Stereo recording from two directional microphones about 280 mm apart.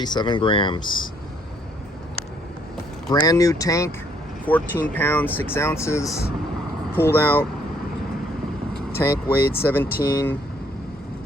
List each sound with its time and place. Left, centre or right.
0.0 s speech: centre
3.1 s speech: centre
7.1 s speech: centre
8.7 s vehicle: centre
9.6 s speech: centre